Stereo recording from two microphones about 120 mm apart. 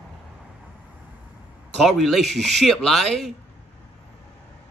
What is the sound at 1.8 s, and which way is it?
Speech, centre (ahead or behind).